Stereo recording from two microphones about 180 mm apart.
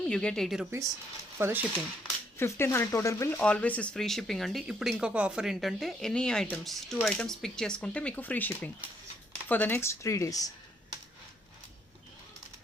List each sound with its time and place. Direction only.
0.0 s speech: 5° left (ahead or behind)
1.4 s speech: 15° right (ahead or behind)
2.4 s speech: 15° left (ahead or behind)